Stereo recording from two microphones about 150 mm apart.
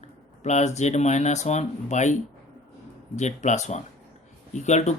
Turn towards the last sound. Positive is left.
turn(degrees=50)  # may be behind; listen again after turning